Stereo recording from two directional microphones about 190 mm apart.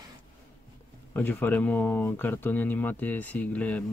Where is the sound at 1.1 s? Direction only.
10° left (ahead or behind).